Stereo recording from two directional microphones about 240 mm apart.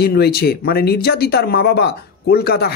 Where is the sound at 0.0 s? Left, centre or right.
Left.